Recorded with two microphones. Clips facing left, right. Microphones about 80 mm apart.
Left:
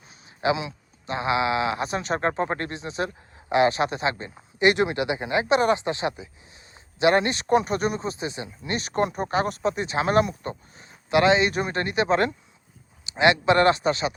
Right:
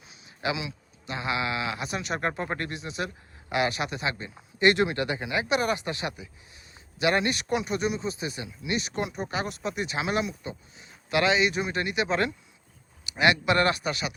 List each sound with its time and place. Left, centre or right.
0.4 s speech: left; by 5.2 s centre
5.2 s speech: left
11.1 s speech: left
13.1 s speech: left